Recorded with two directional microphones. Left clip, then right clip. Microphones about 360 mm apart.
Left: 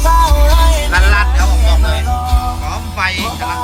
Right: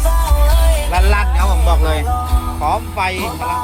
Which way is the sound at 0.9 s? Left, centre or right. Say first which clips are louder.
Left 4 dB; centre.